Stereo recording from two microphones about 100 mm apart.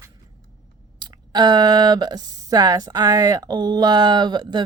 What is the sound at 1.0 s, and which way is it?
Speech, 45° right (ahead or behind).